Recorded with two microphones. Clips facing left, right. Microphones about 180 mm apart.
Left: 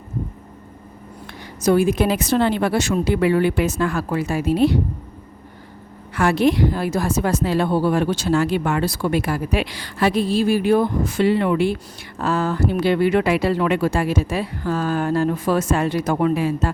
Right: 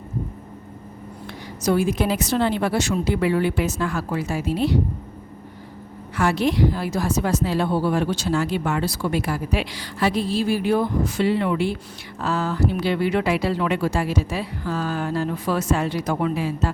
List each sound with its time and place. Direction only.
1.6 s a woman's voice: 55° left (ahead or behind)
6.1 s a woman's voice: 55° left (ahead or behind)